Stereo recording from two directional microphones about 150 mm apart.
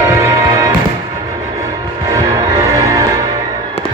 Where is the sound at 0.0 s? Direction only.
20° right (ahead or behind).